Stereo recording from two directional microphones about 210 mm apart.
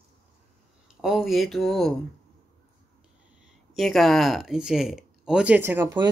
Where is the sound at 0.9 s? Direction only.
Centre (ahead or behind).